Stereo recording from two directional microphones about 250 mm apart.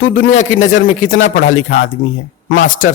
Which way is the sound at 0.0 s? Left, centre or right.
Left.